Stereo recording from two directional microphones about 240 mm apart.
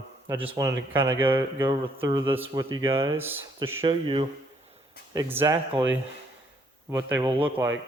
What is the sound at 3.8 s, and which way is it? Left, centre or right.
Speech, right.